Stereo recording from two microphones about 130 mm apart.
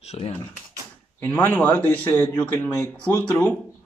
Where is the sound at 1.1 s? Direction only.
15° left (ahead or behind).